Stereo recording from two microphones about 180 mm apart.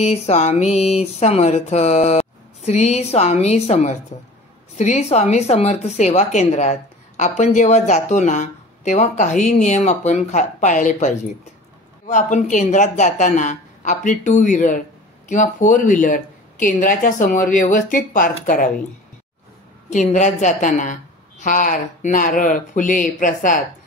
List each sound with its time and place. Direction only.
0.0 s a woman's voice: 40° left (ahead or behind)
19.9 s a woman's voice: 45° left (ahead or behind)